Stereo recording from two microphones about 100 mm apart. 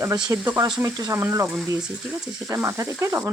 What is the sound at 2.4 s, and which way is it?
Sizzle, 30° right (ahead or behind).